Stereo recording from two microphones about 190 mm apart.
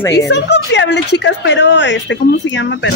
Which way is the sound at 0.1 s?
65° left (ahead or behind).